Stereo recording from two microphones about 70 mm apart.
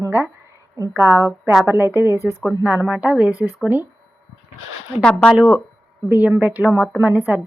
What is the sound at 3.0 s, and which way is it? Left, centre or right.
Speech, centre.